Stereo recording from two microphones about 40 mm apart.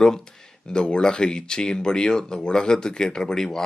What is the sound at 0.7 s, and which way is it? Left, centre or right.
Speech, left.